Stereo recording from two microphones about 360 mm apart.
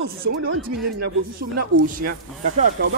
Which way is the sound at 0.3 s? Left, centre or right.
Right.